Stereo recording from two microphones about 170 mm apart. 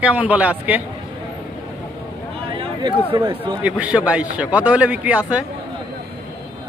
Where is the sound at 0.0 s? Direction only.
10° right (ahead or behind).